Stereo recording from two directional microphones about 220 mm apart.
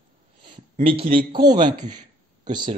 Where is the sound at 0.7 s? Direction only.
25° right (ahead or behind).